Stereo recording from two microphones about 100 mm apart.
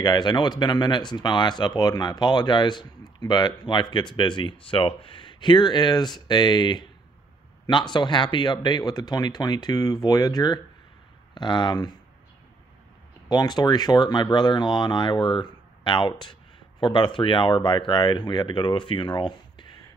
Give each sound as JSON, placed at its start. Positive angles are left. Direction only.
{"t": 0.0, "sound": "speech", "side_deg": 45}
{"t": 13.3, "sound": "speech", "side_deg": 45}